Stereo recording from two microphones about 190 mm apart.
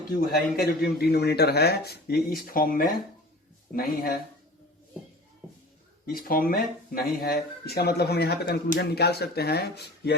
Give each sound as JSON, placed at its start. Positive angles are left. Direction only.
{"t": 0.2, "sound": "speech", "side_deg": 50}
{"t": 6.1, "sound": "speech", "side_deg": 50}